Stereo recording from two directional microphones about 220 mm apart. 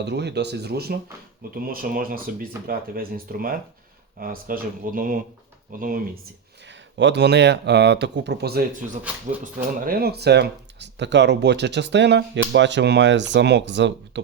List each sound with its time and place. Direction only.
0.0 s speech: 50° right (ahead or behind)
6.7 s speech: 55° right (ahead or behind)